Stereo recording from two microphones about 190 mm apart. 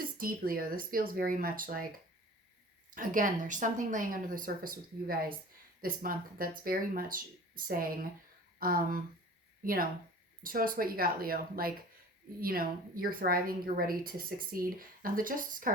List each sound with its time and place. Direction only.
0.0 s a woman's voice: 50° right (ahead or behind)
2.9 s a woman's voice: 45° right (ahead or behind)
10.4 s a woman's voice: 45° right (ahead or behind)